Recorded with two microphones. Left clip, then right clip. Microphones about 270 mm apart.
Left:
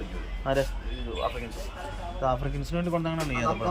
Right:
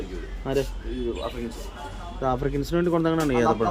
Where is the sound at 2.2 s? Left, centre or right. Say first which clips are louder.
Right 3 dB; centre.